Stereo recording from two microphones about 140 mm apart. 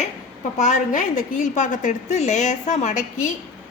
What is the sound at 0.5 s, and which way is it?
A woman's voice, 60° left (ahead or behind).